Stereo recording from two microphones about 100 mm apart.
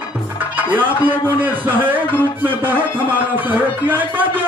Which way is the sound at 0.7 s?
20° right (ahead or behind).